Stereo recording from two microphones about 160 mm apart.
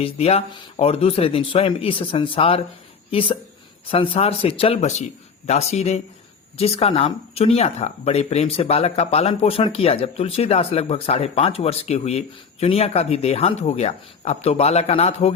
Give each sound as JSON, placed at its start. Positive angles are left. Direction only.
{"t": 0.0, "sound": "speech", "side_deg": 40}